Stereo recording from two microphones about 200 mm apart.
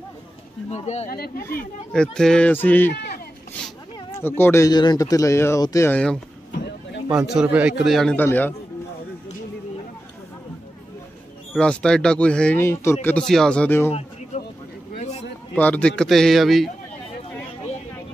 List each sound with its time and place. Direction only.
0.7 s speech: 35° left (ahead or behind)
1.1 s speech: 50° left (ahead or behind)
1.9 s a man's voice: 5° left (ahead or behind)
2.9 s a sound: 50° left (ahead or behind)
3.6 s speech: 10° left (ahead or behind)
6.5 s vehicle: 55° left (ahead or behind)
7.1 s a man's voice: 5° right (ahead or behind)
11.5 s a man's voice: 5° left (ahead or behind)
15.0 s a sound: 30° left (ahead or behind)
15.5 s a man's voice: 5° left (ahead or behind)